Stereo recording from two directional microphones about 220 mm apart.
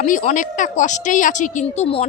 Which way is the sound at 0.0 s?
35° left (ahead or behind).